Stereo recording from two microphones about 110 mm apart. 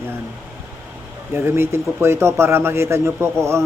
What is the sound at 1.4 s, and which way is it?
Speech, 20° right (ahead or behind).